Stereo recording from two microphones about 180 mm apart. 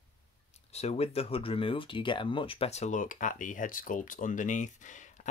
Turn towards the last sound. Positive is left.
turn(degrees=45)  # may be behind; listen again after turning